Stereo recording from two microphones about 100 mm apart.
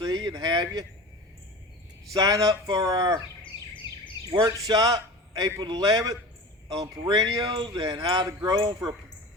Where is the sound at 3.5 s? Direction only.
55° left (ahead or behind).